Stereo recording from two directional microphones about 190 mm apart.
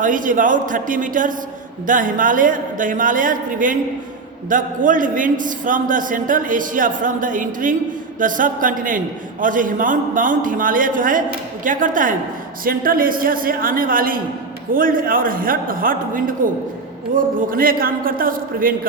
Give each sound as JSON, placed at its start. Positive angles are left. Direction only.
{"t": 0.0, "sound": "a man's voice", "side_deg": -45}